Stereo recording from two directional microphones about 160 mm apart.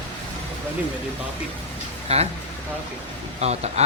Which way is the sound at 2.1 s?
40° right (ahead or behind).